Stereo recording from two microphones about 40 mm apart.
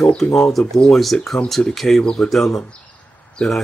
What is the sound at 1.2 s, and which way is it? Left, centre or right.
Speech, centre.